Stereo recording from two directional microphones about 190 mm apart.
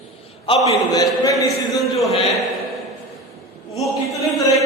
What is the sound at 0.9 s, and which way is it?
Speech, 15° left (ahead or behind).